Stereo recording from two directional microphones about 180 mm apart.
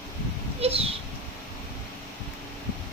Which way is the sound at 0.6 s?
35° right (ahead or behind).